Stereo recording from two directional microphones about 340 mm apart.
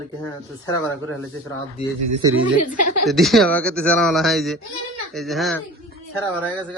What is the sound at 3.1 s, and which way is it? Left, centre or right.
A man's voice, centre.